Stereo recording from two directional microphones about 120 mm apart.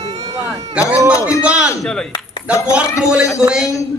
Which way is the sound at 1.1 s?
10° right (ahead or behind).